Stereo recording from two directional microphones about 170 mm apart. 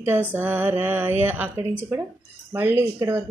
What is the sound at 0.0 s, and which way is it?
Music, 10° right (ahead or behind).